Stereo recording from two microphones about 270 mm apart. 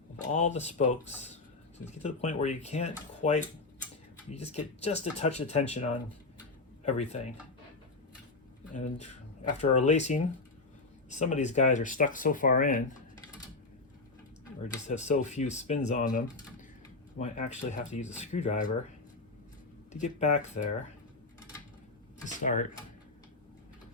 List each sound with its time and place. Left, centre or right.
0.3 s speech: left
8.7 s speech: left
14.8 s speech: left
19.9 s speech: left
22.3 s speech: left